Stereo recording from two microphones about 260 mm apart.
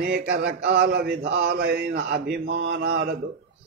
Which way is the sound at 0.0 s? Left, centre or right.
Right.